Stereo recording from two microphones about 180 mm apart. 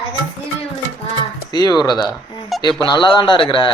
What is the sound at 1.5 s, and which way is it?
Speech, 20° left (ahead or behind).